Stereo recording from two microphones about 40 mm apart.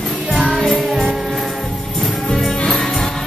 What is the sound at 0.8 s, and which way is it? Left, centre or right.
Music, centre.